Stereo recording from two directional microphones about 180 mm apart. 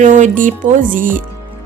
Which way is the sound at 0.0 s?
45° right (ahead or behind).